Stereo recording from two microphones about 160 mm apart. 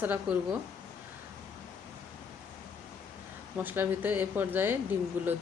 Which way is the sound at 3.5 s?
10° right (ahead or behind).